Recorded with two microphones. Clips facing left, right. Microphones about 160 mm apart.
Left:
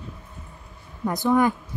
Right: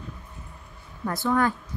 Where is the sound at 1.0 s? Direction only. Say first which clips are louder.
Left 4 dB; 20° left (ahead or behind).